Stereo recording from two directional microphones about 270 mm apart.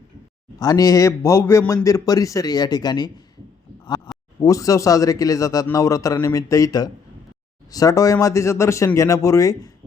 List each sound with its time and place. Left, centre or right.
0.6 s a man's voice: centre
3.8 s a sound: centre
4.4 s a man's voice: centre